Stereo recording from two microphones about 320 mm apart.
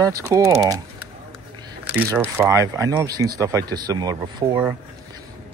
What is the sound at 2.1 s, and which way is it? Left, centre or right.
Speech, centre.